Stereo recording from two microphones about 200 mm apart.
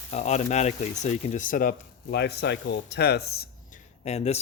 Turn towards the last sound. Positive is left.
turn(degrees=30)  # may be behind; listen again after turning